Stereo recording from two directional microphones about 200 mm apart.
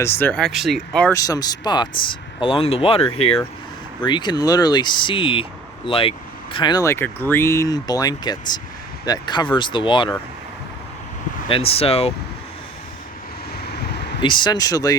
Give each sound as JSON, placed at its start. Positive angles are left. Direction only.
{"t": 0.0, "sound": "speech", "side_deg": 10}
{"t": 1.1, "sound": "speech", "side_deg": 15}
{"t": 11.4, "sound": "speech", "side_deg": 30}
{"t": 13.6, "sound": "vehicle", "side_deg": 55}
{"t": 14.2, "sound": "speech", "side_deg": 25}